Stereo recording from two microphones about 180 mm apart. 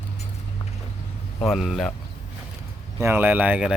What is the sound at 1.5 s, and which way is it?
Speech, centre (ahead or behind).